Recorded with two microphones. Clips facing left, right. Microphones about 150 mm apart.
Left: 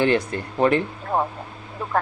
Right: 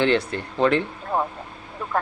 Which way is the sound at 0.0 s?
10° left (ahead or behind).